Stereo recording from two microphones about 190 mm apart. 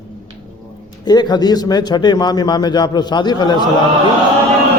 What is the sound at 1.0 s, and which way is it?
A man's voice, 20° left (ahead or behind).